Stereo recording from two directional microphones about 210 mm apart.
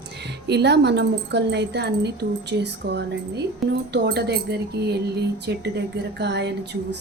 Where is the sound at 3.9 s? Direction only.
50° right (ahead or behind).